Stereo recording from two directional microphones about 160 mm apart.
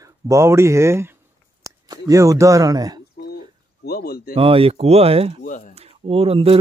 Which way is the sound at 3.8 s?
75° left (ahead or behind).